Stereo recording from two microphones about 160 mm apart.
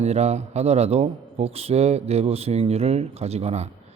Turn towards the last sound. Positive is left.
turn(degrees=-45)  # may be behind; listen again after turning